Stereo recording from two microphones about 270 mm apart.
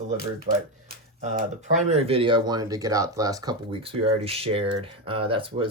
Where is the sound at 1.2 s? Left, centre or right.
Right.